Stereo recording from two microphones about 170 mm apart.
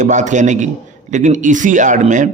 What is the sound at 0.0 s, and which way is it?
Speech, 45° right (ahead or behind).